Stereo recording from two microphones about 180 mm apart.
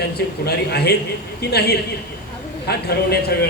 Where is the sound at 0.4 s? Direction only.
60° left (ahead or behind).